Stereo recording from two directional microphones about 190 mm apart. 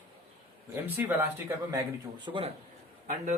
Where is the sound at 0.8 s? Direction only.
10° right (ahead or behind).